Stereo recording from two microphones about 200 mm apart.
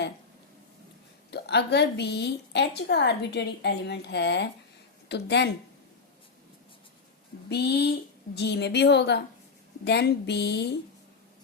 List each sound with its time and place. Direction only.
1.3 s a woman's voice: 55° left (ahead or behind)
7.5 s a woman's voice: 55° left (ahead or behind)